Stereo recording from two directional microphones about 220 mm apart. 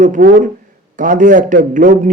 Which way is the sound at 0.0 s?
35° right (ahead or behind).